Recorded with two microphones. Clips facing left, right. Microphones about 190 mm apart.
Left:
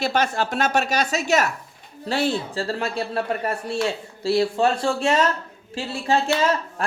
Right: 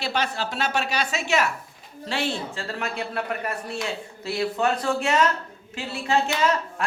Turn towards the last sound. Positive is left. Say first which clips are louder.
# left 2 dB
turn(degrees=35)  # may be behind; listen again after turning